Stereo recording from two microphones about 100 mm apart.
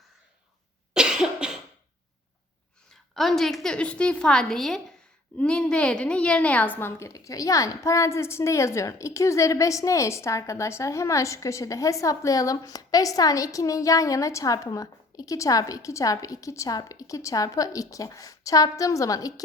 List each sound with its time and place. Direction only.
0.9 s cough: 5° right (ahead or behind)
2.9 s a woman's voice: centre (ahead or behind); by 7.1 s 25° left (ahead or behind)
7.1 s a woman's voice: 35° left (ahead or behind)